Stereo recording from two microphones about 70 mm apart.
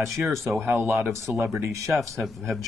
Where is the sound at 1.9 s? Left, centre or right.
Centre.